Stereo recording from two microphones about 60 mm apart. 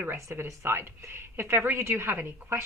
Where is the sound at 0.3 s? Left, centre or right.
Right.